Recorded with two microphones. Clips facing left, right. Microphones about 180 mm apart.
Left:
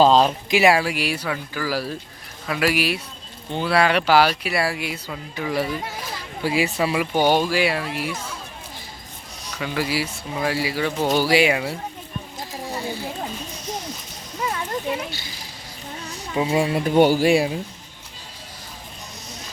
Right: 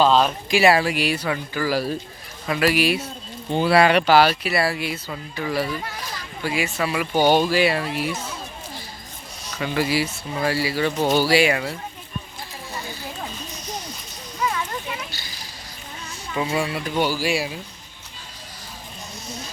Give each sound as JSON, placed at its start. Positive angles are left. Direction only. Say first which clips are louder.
{"t": 0.0, "sound": "a sound", "louder": "left 2 dB", "side_deg": 35}
{"t": 0.5, "sound": "speech", "louder": "right 1 dB", "side_deg": 15}
{"t": 3.6, "sound": "a child's voice", "louder": "right 3 dB", "side_deg": -5}
{"t": 6.7, "sound": "a child's voice", "louder": "left 1 dB", "side_deg": 20}
{"t": 8.1, "sound": "speech", "louder": "right 1 dB", "side_deg": -5}
{"t": 9.6, "sound": "speech", "louder": "right 2 dB", "side_deg": 5}
{"t": 12.4, "sound": "a sound", "louder": "left 5 dB", "side_deg": 35}
{"t": 14.5, "sound": "a sound", "louder": "left 3 dB", "side_deg": 35}
{"t": 16.3, "sound": "a child's voice", "louder": "left 3 dB", "side_deg": 20}
{"t": 16.7, "sound": "speech", "louder": "left 7 dB", "side_deg": 50}